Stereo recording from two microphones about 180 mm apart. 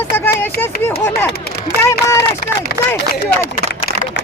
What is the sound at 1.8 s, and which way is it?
Speech, 15° left (ahead or behind).